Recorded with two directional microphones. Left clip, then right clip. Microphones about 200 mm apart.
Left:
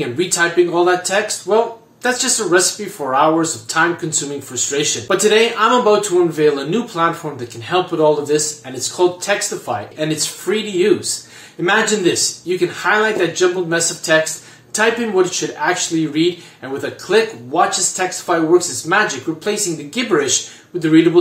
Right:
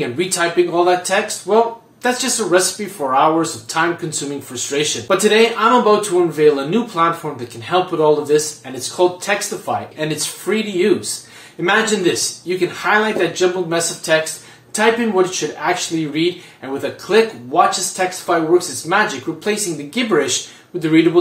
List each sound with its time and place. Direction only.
0.0 s speech: centre (ahead or behind)